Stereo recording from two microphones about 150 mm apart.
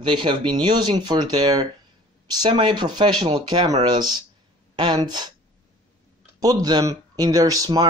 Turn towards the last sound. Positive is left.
turn(degrees=-25)  # may be behind; listen again after turning